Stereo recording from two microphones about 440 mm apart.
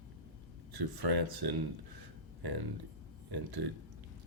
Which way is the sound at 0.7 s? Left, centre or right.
Right.